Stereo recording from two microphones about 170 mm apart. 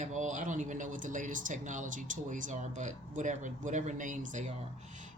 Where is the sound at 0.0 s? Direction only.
45° right (ahead or behind).